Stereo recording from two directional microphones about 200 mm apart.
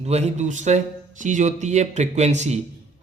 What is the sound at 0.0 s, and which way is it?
A man's voice, 30° right (ahead or behind).